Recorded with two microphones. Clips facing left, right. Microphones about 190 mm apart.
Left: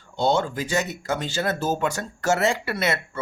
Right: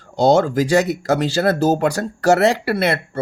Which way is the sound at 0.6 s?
35° right (ahead or behind).